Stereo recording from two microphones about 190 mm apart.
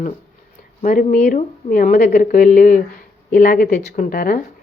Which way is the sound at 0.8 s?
45° left (ahead or behind).